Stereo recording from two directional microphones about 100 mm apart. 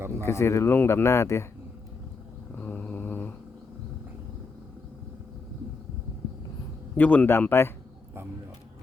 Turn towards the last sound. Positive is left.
turn(degrees=25)  # may be behind; listen again after turning